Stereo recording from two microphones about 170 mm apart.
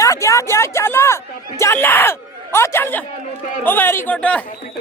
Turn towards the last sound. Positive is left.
turn(degrees=5)  # may be behind; listen again after turning